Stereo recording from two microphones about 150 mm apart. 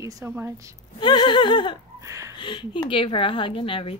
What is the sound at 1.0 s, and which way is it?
Speech, 30° left (ahead or behind).